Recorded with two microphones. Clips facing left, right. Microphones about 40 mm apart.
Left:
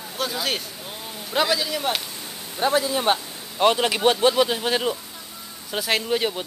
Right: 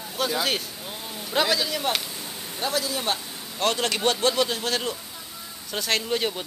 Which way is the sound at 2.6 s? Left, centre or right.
Left.